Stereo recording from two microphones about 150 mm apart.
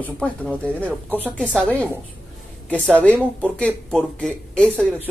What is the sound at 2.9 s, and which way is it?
A man's voice, 10° left (ahead or behind).